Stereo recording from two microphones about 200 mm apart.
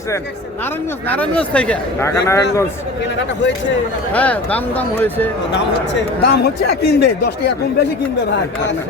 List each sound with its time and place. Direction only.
1.0 s a man's voice: 10° left (ahead or behind)
4.1 s a man's voice: 5° left (ahead or behind)
5.5 s speech: 55° left (ahead or behind)